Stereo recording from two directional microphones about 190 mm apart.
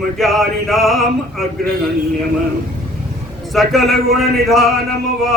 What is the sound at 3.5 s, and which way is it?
Speech, centre (ahead or behind).